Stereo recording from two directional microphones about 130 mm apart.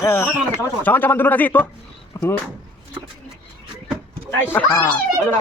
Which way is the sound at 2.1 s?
25° left (ahead or behind).